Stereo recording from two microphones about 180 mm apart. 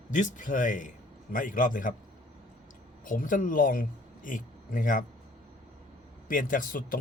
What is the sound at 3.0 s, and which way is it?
Speech, 50° left (ahead or behind).